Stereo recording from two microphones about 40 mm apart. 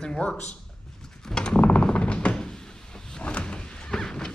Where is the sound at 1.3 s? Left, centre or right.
Left.